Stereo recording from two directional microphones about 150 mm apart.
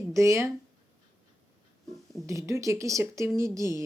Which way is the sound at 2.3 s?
20° right (ahead or behind).